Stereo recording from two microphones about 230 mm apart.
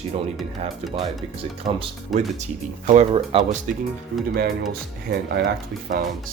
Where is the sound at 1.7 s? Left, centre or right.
Right.